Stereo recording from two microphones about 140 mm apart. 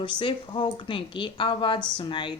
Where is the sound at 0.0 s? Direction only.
35° left (ahead or behind).